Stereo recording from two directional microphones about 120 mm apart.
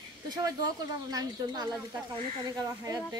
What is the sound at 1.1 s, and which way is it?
A woman's voice, 35° right (ahead or behind).